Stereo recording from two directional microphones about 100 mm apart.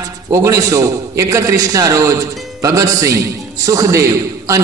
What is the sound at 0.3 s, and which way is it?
A man's voice, 30° right (ahead or behind).